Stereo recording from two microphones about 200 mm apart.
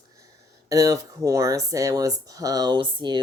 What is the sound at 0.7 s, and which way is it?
Speech, 15° right (ahead or behind).